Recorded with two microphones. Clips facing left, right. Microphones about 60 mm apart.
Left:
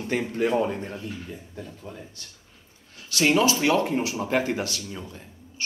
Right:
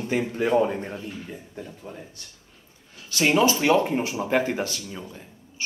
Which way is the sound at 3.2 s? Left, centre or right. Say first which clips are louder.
Right 1 dB; centre.